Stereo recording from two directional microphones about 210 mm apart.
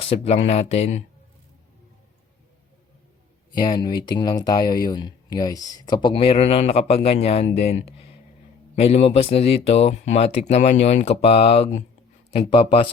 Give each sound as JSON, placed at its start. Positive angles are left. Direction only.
{"t": 0.1, "sound": "speech", "side_deg": 30}
{"t": 3.5, "sound": "speech", "side_deg": 20}